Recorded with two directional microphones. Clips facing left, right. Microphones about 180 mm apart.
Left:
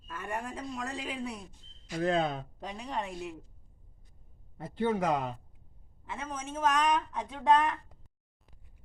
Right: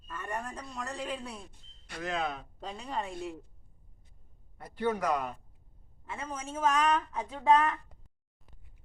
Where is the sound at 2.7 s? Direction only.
Centre (ahead or behind).